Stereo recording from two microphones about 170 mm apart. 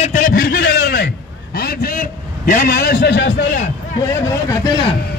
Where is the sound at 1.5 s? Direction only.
65° left (ahead or behind).